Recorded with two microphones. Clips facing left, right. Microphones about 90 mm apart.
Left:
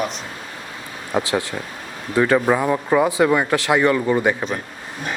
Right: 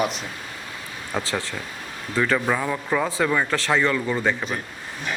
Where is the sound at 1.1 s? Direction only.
15° left (ahead or behind).